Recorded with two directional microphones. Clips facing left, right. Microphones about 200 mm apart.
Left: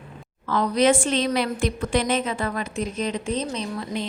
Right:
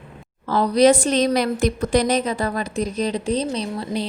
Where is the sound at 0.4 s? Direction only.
35° right (ahead or behind).